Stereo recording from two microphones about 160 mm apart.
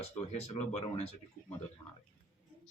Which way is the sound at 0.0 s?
40° left (ahead or behind).